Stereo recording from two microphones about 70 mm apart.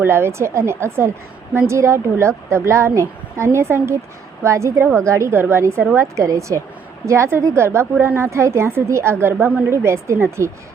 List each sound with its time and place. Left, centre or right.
0.0 s a woman's voice: right
6.1 s a woman's voice: right